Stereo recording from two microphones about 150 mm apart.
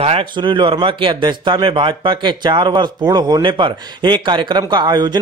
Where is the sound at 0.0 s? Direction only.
40° right (ahead or behind).